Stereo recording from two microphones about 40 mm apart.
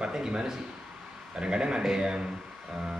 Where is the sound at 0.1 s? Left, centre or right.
Centre.